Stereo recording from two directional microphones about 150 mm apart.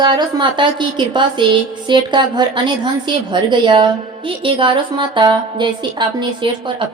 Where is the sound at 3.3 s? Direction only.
30° right (ahead or behind).